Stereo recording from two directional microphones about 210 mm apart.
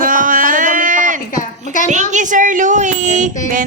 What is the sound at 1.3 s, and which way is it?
Speech, 35° left (ahead or behind).